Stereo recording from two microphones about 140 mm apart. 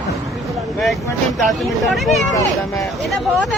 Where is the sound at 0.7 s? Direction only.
Centre (ahead or behind).